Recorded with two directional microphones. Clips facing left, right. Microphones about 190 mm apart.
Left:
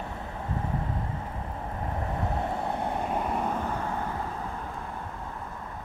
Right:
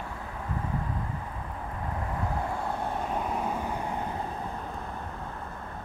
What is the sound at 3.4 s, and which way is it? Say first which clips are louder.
Vehicle: left 1 dB; 10° right (ahead or behind).